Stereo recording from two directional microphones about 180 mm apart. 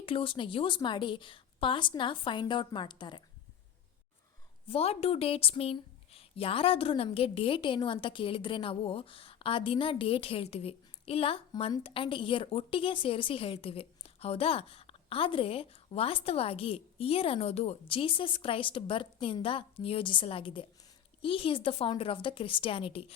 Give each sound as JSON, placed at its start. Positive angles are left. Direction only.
{"t": 0.0, "sound": "a woman's voice", "side_deg": 30}
{"t": 4.7, "sound": "a woman's voice", "side_deg": 35}